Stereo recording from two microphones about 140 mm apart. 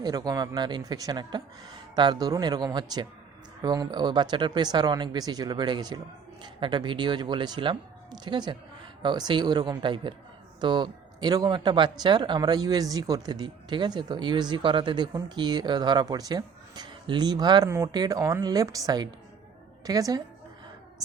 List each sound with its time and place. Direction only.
0.0 s a woman's voice: 30° right (ahead or behind)